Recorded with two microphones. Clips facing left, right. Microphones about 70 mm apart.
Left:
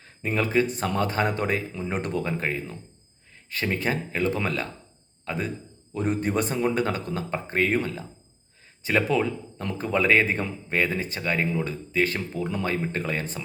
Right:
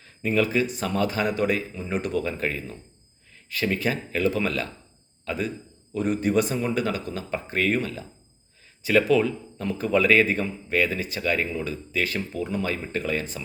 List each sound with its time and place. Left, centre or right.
0.0 s a man's voice: left